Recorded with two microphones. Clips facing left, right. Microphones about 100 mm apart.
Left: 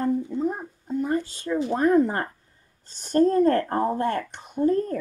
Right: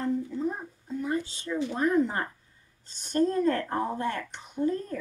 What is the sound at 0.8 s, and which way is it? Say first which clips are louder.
A woman's voice: left 5 dB; 50° left (ahead or behind).